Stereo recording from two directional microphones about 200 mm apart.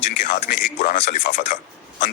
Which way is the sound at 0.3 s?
40° left (ahead or behind).